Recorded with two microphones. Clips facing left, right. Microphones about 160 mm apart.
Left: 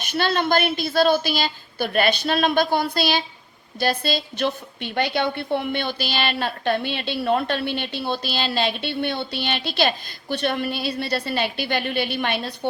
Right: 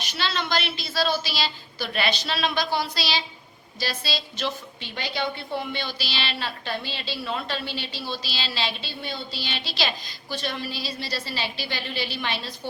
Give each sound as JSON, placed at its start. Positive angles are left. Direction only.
{"t": 0.0, "sound": "a woman's voice", "side_deg": 50}